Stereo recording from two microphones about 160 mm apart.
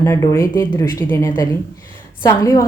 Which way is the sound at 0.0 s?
20° left (ahead or behind).